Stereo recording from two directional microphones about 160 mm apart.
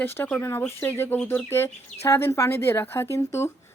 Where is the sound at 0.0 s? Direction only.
15° left (ahead or behind).